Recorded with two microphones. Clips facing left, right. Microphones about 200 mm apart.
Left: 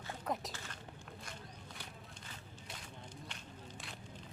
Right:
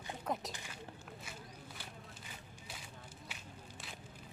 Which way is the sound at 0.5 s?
15° right (ahead or behind).